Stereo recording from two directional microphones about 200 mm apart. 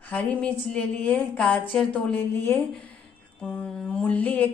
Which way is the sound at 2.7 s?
5° left (ahead or behind).